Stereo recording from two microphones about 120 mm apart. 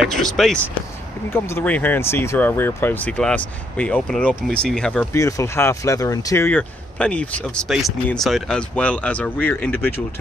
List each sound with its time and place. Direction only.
0.0 s speech: 5° left (ahead or behind)
1.3 s speech: 20° left (ahead or behind)
5.1 s speech: 25° left (ahead or behind)